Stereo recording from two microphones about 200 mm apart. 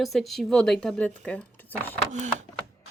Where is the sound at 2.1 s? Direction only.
35° right (ahead or behind).